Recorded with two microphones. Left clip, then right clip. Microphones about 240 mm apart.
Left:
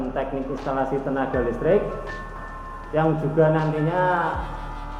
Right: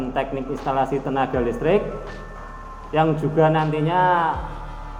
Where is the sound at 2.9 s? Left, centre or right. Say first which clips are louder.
Right 2 dB; right.